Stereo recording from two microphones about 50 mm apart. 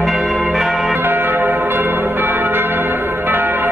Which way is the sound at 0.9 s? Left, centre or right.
Right.